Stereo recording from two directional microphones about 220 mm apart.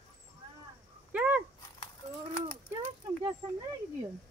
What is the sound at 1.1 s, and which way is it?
Dog, 5° right (ahead or behind).